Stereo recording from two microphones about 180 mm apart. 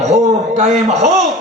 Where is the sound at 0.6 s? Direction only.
40° right (ahead or behind).